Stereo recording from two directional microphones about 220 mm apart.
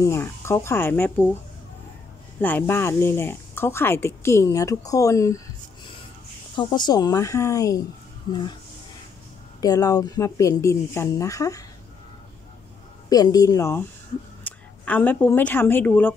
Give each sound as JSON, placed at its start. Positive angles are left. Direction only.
{"t": 0.0, "sound": "speech", "side_deg": 10}
{"t": 2.4, "sound": "speech", "side_deg": 10}
{"t": 6.5, "sound": "speech", "side_deg": 20}
{"t": 9.6, "sound": "speech", "side_deg": 15}
{"t": 13.1, "sound": "speech", "side_deg": 15}